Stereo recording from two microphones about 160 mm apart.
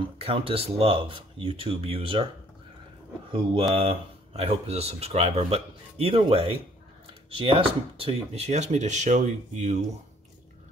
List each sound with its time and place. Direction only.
0.0 s speech: 35° right (ahead or behind)
3.3 s speech: 35° right (ahead or behind)